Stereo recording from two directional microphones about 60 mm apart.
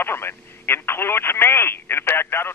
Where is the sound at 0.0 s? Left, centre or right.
Left.